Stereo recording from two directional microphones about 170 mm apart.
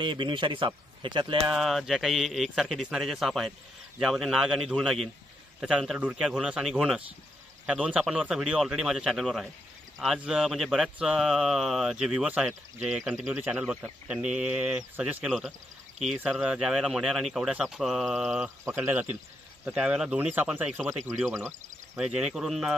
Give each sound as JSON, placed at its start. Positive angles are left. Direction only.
{"t": 0.0, "sound": "speech", "side_deg": -30}
{"t": 1.5, "sound": "speech", "side_deg": 0}
{"t": 21.3, "sound": "speech", "side_deg": -15}
{"t": 21.9, "sound": "speech", "side_deg": -5}